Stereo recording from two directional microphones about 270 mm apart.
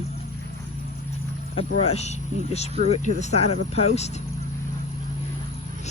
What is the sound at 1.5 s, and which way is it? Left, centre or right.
Speech, left.